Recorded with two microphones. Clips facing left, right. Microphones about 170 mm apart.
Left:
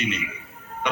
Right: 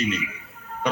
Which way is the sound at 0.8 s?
35° right (ahead or behind).